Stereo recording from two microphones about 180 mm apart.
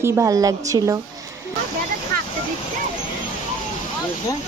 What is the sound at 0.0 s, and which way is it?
Speech, 20° right (ahead or behind).